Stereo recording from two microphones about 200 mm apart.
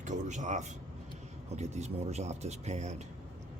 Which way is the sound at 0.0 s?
40° right (ahead or behind).